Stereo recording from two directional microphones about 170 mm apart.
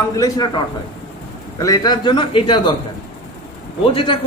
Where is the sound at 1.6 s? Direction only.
20° left (ahead or behind).